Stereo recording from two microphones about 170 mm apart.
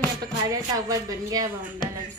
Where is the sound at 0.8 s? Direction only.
20° right (ahead or behind).